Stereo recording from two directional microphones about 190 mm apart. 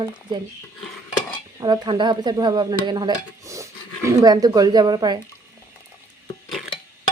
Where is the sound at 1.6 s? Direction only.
25° right (ahead or behind).